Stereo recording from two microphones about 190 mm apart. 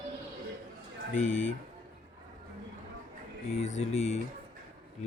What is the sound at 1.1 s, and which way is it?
Speech, 40° left (ahead or behind).